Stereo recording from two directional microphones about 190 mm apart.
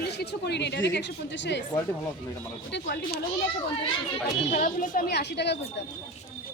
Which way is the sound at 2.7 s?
55° left (ahead or behind).